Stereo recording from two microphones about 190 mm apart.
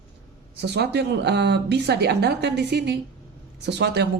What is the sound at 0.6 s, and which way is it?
Speech, 60° right (ahead or behind).